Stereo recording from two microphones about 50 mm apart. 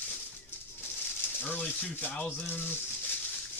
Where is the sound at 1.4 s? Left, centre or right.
Left.